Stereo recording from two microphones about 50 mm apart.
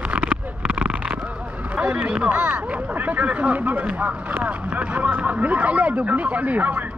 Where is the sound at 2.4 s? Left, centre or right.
Right.